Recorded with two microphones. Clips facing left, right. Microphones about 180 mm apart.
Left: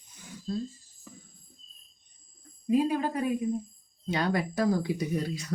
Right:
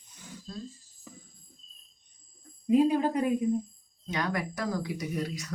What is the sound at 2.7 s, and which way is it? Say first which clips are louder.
Speech: right 2 dB; 20° right (ahead or behind).